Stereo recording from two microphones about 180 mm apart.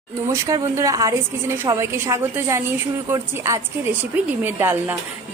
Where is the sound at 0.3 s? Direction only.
15° right (ahead or behind).